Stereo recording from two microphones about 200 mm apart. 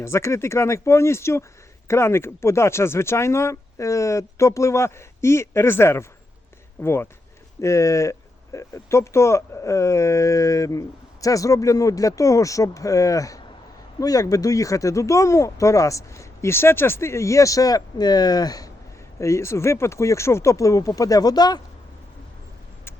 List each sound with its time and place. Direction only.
0.0 s speech: 15° left (ahead or behind)